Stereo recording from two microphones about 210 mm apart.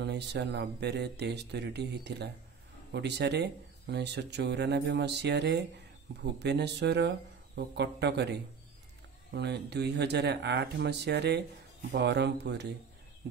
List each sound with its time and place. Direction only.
0.0 s speech: 55° right (ahead or behind)